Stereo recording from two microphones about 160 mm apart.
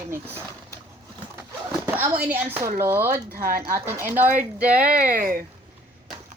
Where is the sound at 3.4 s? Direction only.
65° right (ahead or behind).